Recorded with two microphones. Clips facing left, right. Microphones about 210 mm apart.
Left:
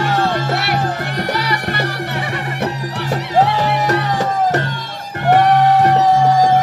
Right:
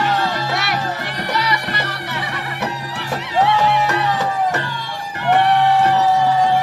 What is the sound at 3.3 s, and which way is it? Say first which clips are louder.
Music: even; 40° left (ahead or behind).